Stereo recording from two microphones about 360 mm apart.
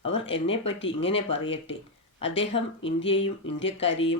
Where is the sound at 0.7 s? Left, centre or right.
Left.